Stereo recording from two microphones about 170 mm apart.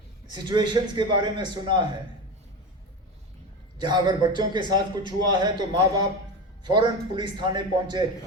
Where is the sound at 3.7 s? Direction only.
25° right (ahead or behind).